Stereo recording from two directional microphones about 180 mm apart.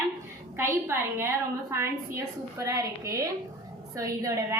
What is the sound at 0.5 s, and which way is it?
A woman's voice, 15° right (ahead or behind).